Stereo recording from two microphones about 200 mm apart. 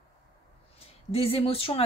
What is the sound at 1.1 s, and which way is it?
Speech, 30° left (ahead or behind).